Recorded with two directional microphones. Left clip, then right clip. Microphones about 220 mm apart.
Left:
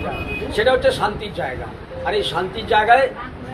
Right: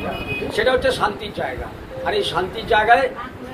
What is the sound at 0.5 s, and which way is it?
A man's voice, 25° right (ahead or behind).